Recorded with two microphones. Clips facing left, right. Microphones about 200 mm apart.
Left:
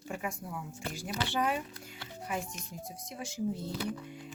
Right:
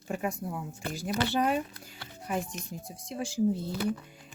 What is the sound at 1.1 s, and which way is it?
Speech, 55° right (ahead or behind).